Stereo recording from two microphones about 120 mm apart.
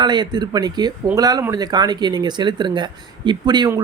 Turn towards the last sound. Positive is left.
turn(degrees=-35)  # may be behind; listen again after turning